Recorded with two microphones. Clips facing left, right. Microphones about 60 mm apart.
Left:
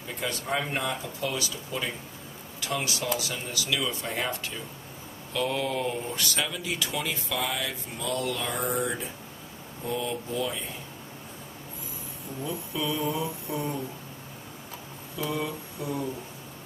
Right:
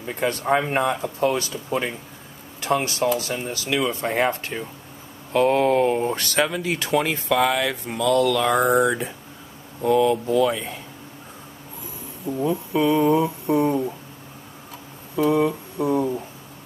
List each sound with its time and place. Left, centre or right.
0.0 s speech: right
12.4 s speech: right
15.3 s speech: right